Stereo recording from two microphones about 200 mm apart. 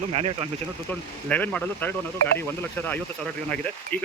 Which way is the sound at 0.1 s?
30° right (ahead or behind).